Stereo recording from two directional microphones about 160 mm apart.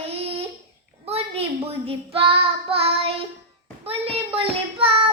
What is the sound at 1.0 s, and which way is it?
Child singing, 40° right (ahead or behind).